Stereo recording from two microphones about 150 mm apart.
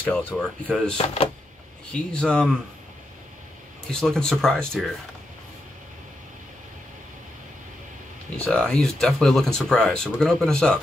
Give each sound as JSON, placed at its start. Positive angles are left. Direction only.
{"t": 0.0, "sound": "speech", "side_deg": 10}
{"t": 0.9, "sound": "speech", "side_deg": 40}
{"t": 1.9, "sound": "speech", "side_deg": 5}
{"t": 3.9, "sound": "speech", "side_deg": 5}
{"t": 8.4, "sound": "speech", "side_deg": 5}